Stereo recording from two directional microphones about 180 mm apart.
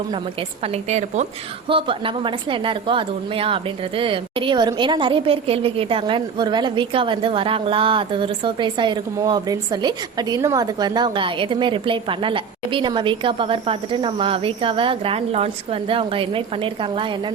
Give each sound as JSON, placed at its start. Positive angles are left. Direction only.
{"t": 0.6, "sound": "a woman's voice", "side_deg": -35}